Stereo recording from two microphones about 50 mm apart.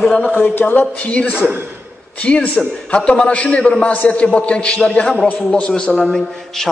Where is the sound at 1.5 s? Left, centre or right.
Right.